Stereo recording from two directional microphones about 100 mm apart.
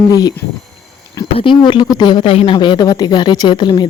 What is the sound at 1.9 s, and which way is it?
Speech, 45° left (ahead or behind).